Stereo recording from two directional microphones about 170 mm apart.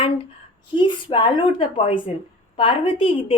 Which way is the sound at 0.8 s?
30° left (ahead or behind).